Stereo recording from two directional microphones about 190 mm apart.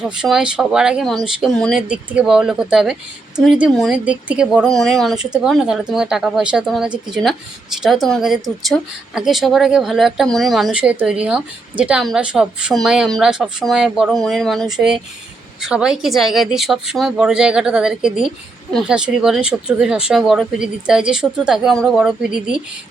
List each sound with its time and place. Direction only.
0.2 s speech: 5° right (ahead or behind)